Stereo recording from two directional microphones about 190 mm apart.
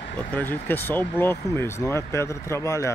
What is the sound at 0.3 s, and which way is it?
Speech, 10° left (ahead or behind).